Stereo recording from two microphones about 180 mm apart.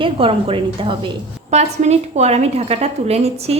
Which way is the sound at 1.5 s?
40° right (ahead or behind).